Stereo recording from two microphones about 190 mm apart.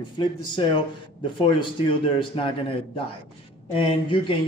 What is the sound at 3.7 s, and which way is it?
Speech, 25° left (ahead or behind).